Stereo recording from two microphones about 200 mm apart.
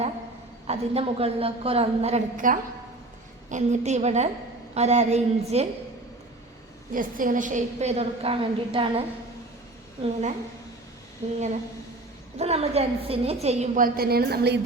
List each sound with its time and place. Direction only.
0.7 s a woman's voice: 30° right (ahead or behind)
6.9 s a woman's voice: 45° right (ahead or behind)
12.4 s a woman's voice: 30° right (ahead or behind); by 14.6 s 55° right (ahead or behind)